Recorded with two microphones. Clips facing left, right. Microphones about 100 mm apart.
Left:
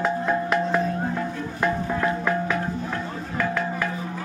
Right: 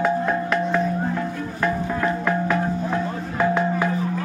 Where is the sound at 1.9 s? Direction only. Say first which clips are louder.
Right 1 dB; 5° left (ahead or behind).